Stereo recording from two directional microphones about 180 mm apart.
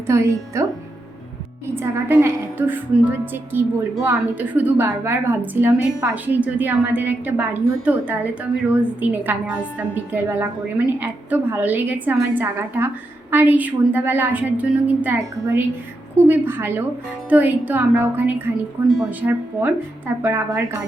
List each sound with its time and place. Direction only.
0.1 s a woman's voice: 15° right (ahead or behind)
1.7 s a woman's voice: 15° right (ahead or behind)